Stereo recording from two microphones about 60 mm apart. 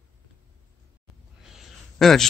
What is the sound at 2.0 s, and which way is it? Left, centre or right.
Speech, centre.